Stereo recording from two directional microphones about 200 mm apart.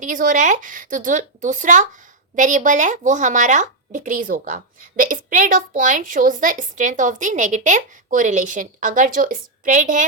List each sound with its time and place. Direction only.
0.0 s speech: 40° right (ahead or behind)